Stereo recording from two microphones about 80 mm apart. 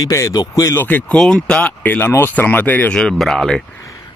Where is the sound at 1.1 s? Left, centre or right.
Centre; by 3.0 s left.